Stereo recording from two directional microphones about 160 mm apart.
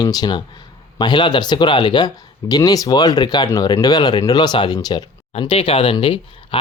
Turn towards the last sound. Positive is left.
turn(degrees=35)  # may be behind; listen again after turning